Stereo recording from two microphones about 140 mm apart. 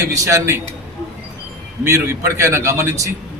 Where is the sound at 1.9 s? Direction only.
20° right (ahead or behind).